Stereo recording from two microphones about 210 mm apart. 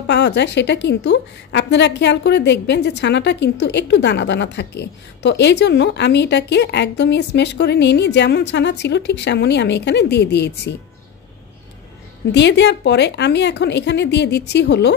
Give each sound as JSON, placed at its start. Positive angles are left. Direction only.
{"t": 0.0, "sound": "a woman's voice", "side_deg": 55}
{"t": 12.3, "sound": "a woman's voice", "side_deg": 55}